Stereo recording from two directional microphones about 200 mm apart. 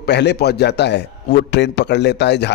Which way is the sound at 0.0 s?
55° left (ahead or behind).